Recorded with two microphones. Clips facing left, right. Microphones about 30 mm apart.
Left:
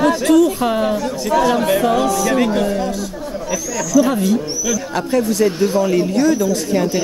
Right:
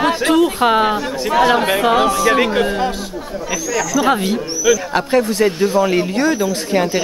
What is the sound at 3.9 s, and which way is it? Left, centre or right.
Speech, right.